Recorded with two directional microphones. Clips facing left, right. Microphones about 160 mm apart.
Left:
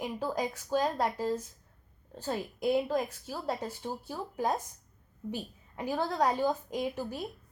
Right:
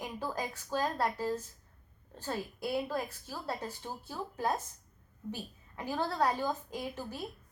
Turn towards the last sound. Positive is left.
turn(degrees=15)  # may be behind; listen again after turning